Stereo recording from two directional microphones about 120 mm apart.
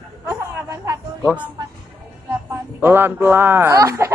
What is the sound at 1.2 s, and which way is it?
Speech, 10° right (ahead or behind).